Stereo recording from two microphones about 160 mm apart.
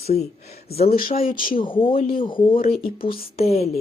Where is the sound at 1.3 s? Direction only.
60° left (ahead or behind).